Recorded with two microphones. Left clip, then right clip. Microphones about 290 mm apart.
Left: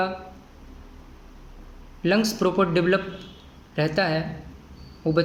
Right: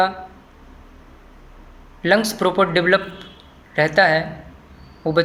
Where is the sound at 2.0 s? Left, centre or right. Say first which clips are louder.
Right 5 dB; right.